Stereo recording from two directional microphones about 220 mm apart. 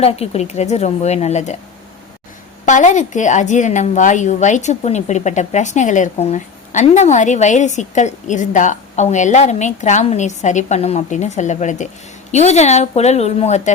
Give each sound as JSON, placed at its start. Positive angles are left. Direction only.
{"t": 0.0, "sound": "a woman's voice", "side_deg": 30}
{"t": 2.6, "sound": "a woman's voice", "side_deg": 35}